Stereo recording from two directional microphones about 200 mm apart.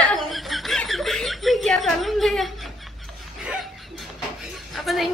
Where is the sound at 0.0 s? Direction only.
Centre (ahead or behind).